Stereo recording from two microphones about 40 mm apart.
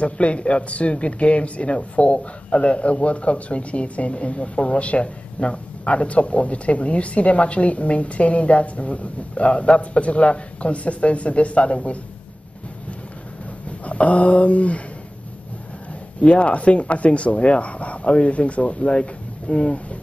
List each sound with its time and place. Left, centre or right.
0.0 s a man's voice: left
13.7 s speech: left
16.2 s a man's voice: left